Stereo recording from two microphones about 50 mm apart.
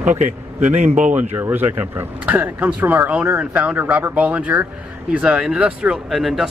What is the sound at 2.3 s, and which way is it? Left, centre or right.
Speech, right.